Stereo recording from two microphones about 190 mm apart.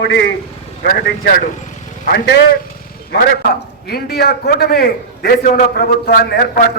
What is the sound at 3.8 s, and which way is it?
A man's voice, 55° left (ahead or behind).